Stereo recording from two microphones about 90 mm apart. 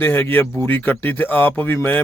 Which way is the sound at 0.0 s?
20° left (ahead or behind).